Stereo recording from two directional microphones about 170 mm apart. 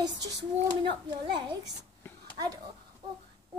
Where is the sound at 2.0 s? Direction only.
15° left (ahead or behind).